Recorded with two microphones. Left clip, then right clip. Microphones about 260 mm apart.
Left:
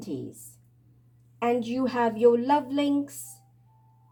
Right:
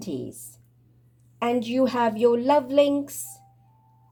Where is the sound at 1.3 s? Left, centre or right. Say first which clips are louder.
Right 3 dB; right.